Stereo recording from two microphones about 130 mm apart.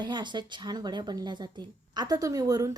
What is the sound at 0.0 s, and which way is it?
Speech, 35° right (ahead or behind).